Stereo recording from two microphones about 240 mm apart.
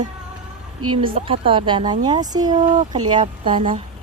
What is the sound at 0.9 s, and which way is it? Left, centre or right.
Speech, right.